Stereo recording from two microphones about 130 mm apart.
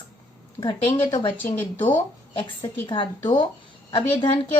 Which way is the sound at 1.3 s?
10° left (ahead or behind).